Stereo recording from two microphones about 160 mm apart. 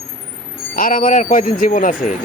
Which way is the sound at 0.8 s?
60° left (ahead or behind).